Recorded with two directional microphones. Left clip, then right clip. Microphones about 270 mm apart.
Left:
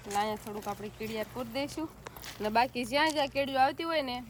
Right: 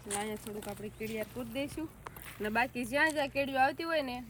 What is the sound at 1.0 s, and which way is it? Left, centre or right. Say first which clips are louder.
Speech: left 2 dB; centre.